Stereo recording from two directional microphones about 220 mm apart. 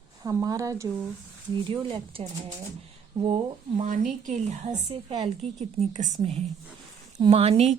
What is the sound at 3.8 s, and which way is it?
A woman's voice, 35° right (ahead or behind).